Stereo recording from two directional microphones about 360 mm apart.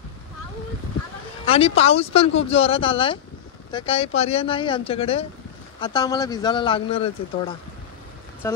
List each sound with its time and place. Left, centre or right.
1.4 s a man's voice: centre